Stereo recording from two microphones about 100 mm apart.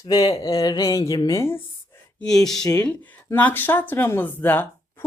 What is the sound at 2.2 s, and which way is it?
Speech, 5° left (ahead or behind).